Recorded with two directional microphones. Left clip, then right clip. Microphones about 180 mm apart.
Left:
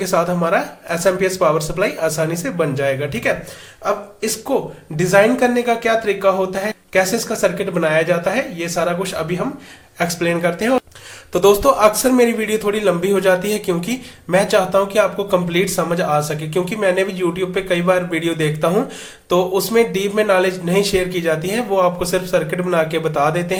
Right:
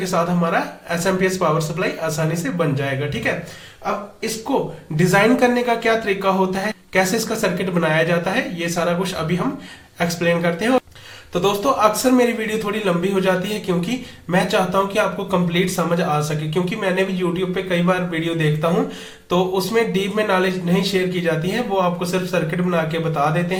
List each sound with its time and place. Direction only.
0.0 s a man's voice: 25° left (ahead or behind)
4.5 s a man's voice: 25° left (ahead or behind)
11.3 s a man's voice: 30° left (ahead or behind)